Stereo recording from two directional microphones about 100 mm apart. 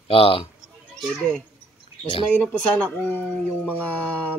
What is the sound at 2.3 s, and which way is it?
Speech, 10° left (ahead or behind).